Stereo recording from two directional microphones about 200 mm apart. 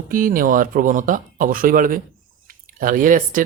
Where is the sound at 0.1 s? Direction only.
45° right (ahead or behind).